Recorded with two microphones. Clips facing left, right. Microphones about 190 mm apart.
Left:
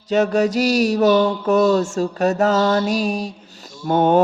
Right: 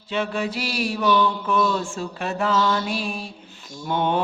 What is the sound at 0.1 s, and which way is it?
Mantra, 45° left (ahead or behind).